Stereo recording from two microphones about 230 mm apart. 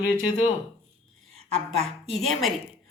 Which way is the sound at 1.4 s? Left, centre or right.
Right.